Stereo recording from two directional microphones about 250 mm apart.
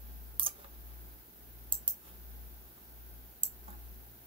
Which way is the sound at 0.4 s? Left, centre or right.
Right.